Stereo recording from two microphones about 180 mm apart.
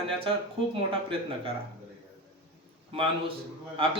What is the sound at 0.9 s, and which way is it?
Speech, 30° right (ahead or behind).